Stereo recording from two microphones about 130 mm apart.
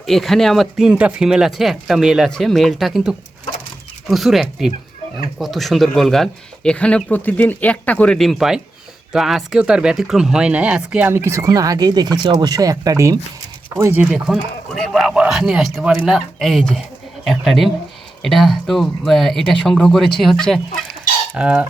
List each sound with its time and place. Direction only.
0.0 s speech: centre (ahead or behind)
11.1 s speech: 20° right (ahead or behind)
14.0 s speech: 5° right (ahead or behind)
21.3 s cutlery: 10° right (ahead or behind)